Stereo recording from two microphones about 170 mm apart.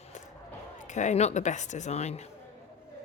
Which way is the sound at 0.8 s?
45° left (ahead or behind).